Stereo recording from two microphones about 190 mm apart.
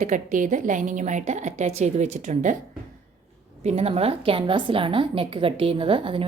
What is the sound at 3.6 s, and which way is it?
A woman's voice, 35° right (ahead or behind).